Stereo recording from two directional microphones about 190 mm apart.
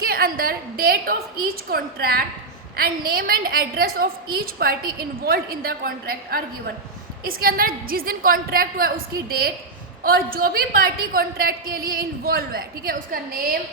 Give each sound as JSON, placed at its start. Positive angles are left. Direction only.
{"t": 0.0, "sound": "a woman's voice", "side_deg": -50}
{"t": 10.0, "sound": "a woman's voice", "side_deg": -50}